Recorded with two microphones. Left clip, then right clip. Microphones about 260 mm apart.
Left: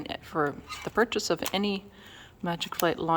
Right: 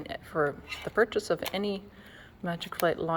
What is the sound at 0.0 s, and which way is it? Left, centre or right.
Speech, centre.